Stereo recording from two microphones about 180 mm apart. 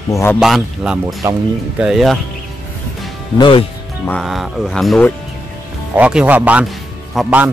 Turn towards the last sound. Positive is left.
turn(degrees=-5)  # may be behind; listen again after turning